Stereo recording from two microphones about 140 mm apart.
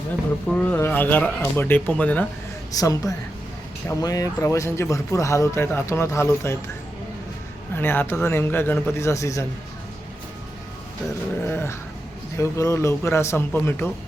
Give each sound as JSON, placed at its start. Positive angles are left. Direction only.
{"t": 0.5, "sound": "speech", "side_deg": 15}
{"t": 2.7, "sound": "speech", "side_deg": 25}
{"t": 7.8, "sound": "speech", "side_deg": 15}
{"t": 11.4, "sound": "speech", "side_deg": 15}